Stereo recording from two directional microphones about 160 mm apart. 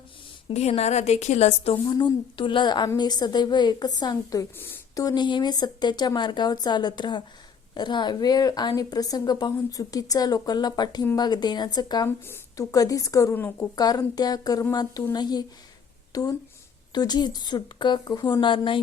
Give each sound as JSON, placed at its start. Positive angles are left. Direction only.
{"t": 0.5, "sound": "a woman's voice", "side_deg": 40}
{"t": 12.0, "sound": "a woman's voice", "side_deg": 15}